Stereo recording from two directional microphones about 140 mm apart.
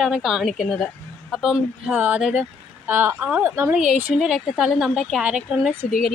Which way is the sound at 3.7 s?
5° right (ahead or behind).